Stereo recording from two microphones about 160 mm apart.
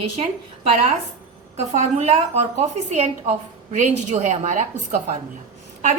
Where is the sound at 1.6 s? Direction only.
45° right (ahead or behind).